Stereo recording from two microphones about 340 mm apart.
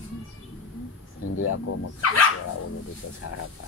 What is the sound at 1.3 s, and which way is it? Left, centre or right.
Speech, left.